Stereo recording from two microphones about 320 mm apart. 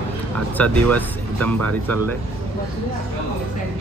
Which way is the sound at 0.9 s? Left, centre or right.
Centre.